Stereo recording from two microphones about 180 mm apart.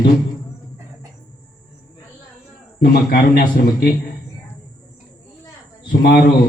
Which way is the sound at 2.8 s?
60° left (ahead or behind).